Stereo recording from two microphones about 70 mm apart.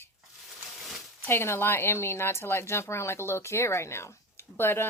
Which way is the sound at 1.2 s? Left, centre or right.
Left.